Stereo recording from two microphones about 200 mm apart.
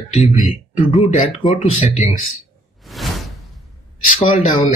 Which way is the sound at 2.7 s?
Centre (ahead or behind).